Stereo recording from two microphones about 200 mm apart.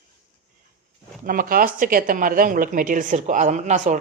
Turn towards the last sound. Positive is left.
turn(degrees=-35)  # may be behind; listen again after turning